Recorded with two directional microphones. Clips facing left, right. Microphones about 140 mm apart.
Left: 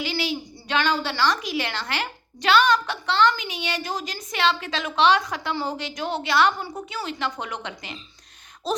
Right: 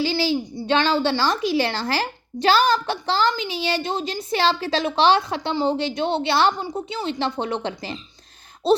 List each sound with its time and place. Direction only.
0.0 s a child's voice: 30° right (ahead or behind)